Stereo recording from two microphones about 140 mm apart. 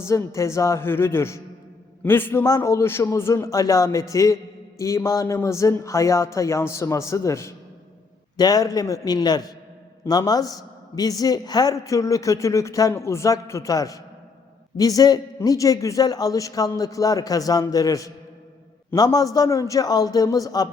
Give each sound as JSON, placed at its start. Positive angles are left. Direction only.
{"t": 0.0, "sound": "a man's voice", "side_deg": 20}